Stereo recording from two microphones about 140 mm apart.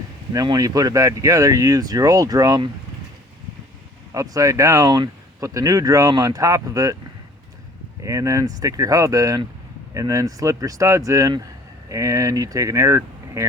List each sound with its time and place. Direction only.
0.3 s speech: 25° right (ahead or behind)
4.1 s speech: 25° right (ahead or behind)
8.0 s speech: 25° right (ahead or behind)